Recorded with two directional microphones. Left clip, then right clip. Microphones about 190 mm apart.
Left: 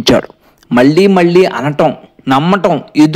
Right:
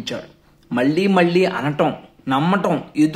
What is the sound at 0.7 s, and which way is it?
Speech, 40° left (ahead or behind).